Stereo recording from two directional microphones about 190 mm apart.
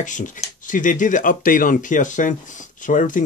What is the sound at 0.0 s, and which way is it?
Speech, 40° left (ahead or behind).